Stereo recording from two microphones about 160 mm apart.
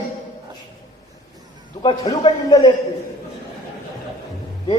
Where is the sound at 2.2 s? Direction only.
30° left (ahead or behind).